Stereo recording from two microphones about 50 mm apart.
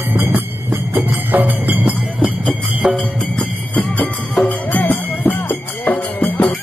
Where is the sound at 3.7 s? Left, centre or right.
Left.